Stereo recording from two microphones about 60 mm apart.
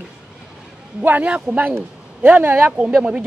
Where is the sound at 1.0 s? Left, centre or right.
Right.